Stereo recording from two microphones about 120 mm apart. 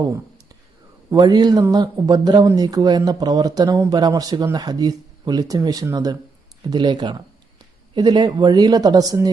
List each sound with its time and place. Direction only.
1.1 s speech: 35° right (ahead or behind)